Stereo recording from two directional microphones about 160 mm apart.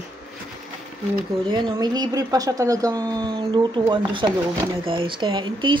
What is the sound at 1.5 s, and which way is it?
Speech, 25° right (ahead or behind).